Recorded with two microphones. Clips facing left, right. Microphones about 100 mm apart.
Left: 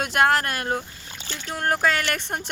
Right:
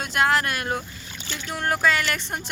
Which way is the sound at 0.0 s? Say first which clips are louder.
Left 2 dB; 60° left (ahead or behind).